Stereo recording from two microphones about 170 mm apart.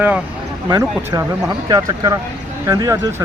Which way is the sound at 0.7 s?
20° right (ahead or behind).